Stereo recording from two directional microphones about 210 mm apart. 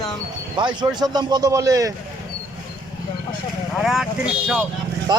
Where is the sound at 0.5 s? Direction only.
20° right (ahead or behind).